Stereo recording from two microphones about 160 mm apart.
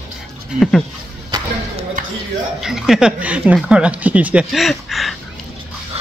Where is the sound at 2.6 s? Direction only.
5° right (ahead or behind).